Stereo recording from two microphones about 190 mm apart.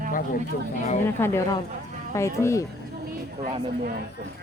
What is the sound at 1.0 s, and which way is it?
Speech, 15° left (ahead or behind).